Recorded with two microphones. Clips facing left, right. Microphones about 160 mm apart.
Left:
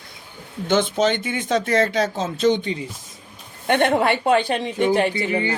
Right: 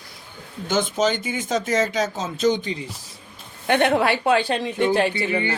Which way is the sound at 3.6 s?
20° left (ahead or behind).